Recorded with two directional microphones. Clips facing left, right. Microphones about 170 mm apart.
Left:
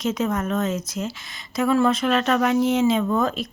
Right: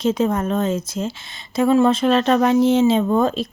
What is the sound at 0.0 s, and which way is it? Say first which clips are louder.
A woman's voice: right 5 dB; 30° right (ahead or behind).